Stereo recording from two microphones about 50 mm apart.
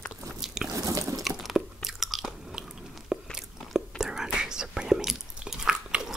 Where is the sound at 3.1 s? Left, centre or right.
Centre.